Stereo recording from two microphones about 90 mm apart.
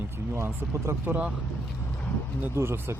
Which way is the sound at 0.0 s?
25° right (ahead or behind).